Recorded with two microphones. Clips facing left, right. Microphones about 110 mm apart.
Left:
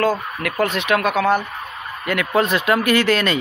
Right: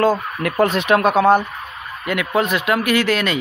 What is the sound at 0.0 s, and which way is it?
Speech, 30° right (ahead or behind).